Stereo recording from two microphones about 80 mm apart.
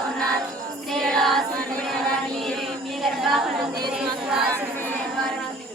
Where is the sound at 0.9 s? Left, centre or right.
Centre.